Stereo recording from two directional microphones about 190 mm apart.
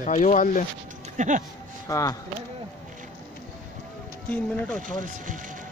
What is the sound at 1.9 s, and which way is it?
Speech, 15° left (ahead or behind).